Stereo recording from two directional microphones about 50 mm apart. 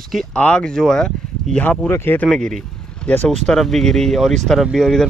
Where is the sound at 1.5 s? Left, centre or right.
Left.